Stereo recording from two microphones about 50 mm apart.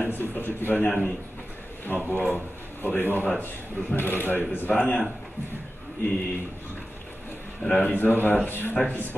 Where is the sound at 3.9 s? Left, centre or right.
Left.